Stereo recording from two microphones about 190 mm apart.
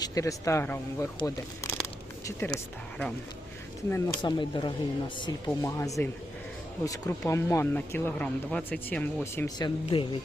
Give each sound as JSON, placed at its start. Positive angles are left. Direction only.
{"t": 0.0, "sound": "speech", "side_deg": 15}
{"t": 3.8, "sound": "speech", "side_deg": 10}
{"t": 4.2, "sound": "speech", "side_deg": 25}